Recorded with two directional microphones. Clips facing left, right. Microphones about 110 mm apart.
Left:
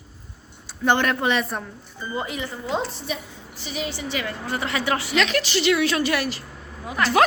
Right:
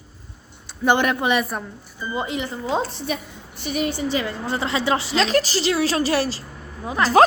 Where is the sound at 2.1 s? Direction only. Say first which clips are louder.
Right 3 dB; 20° right (ahead or behind).